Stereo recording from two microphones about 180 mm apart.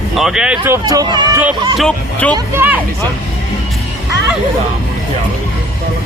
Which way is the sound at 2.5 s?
10° right (ahead or behind).